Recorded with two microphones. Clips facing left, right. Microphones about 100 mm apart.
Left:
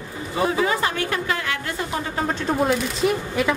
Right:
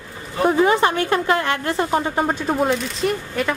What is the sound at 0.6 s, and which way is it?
A woman's voice, 30° right (ahead or behind).